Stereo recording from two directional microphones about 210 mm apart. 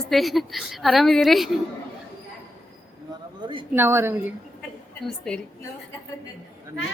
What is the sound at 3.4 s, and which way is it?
Speech, 25° right (ahead or behind).